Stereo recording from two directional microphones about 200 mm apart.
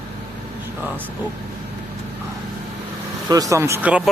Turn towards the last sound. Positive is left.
turn(degrees=-10)  # may be behind; listen again after turning